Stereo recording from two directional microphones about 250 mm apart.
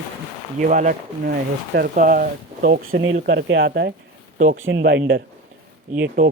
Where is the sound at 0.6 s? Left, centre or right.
Right.